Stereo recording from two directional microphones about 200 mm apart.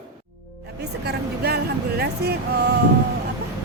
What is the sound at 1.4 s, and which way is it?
Speech, 55° right (ahead or behind).